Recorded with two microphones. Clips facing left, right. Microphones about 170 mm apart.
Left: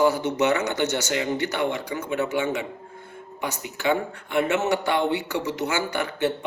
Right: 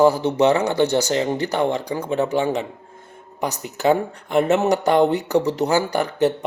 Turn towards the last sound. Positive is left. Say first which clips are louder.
# right 6 dB
turn(degrees=-40)  # may be behind; listen again after turning